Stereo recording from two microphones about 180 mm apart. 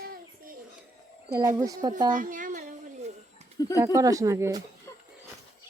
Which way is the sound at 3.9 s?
20° right (ahead or behind).